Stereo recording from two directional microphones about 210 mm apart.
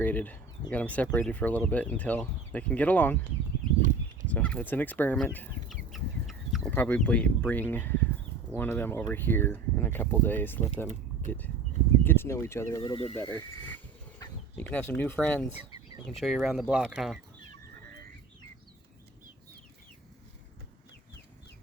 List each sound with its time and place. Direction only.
0.0 s speech: 10° left (ahead or behind)
4.3 s speech: 5° left (ahead or behind)
12.8 s speech: 25° left (ahead or behind)
14.2 s speech: 10° left (ahead or behind)